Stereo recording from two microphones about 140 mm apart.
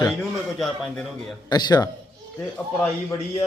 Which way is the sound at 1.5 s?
30° left (ahead or behind).